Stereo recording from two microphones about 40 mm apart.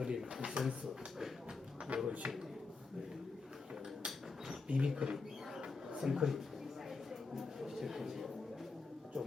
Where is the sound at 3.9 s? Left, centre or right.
Centre.